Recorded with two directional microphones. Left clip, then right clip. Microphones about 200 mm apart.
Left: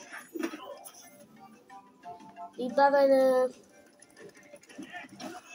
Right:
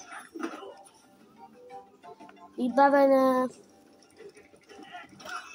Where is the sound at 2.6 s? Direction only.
30° right (ahead or behind).